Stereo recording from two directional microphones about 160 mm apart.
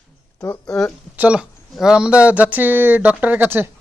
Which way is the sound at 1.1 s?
10° right (ahead or behind).